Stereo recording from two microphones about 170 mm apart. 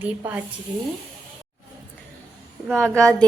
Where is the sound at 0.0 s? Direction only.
10° right (ahead or behind).